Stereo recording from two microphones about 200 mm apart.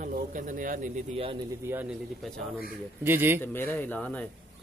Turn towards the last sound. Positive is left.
turn(degrees=5)  # may be behind; listen again after turning